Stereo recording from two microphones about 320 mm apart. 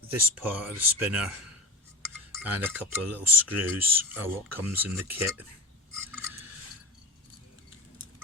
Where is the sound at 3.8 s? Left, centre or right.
Centre.